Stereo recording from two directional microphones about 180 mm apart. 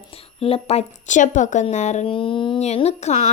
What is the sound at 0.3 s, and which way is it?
Speech, 35° left (ahead or behind).